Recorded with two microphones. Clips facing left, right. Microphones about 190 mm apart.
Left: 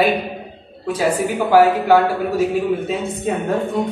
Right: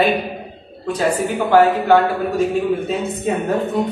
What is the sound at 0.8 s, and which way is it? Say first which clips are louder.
A man's voice: even; 5° left (ahead or behind).